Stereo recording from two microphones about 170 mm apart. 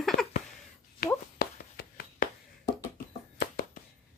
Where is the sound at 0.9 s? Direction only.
60° left (ahead or behind).